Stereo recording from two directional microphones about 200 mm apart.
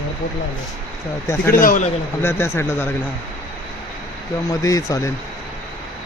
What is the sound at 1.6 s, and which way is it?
Speech, 40° left (ahead or behind).